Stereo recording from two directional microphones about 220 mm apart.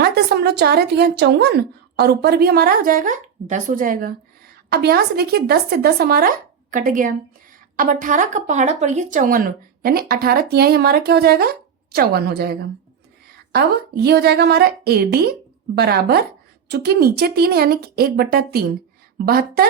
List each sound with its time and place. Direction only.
0.0 s a woman's voice: 45° right (ahead or behind)